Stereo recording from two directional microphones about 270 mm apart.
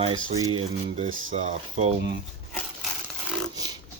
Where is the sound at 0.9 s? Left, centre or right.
Right.